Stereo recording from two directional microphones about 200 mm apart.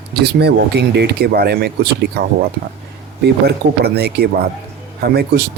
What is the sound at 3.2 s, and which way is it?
Speech, 55° right (ahead or behind).